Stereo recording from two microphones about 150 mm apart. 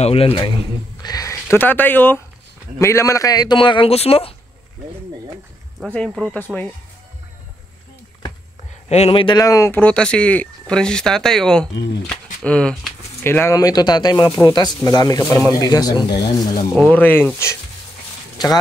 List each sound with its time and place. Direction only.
0.0 s a man's voice: 40° left (ahead or behind)
5.9 s speech: centre (ahead or behind)
6.3 s speech: 10° left (ahead or behind)
8.8 s a man's voice: 45° left (ahead or behind)
9.4 s a man's voice: 20° left (ahead or behind)
16.7 s speech: 5° left (ahead or behind)